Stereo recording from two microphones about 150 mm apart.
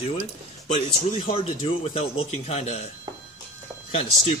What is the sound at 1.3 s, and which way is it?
Speech, 40° left (ahead or behind).